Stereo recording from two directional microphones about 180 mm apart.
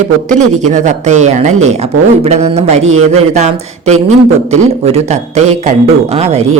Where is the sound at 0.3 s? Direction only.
40° right (ahead or behind).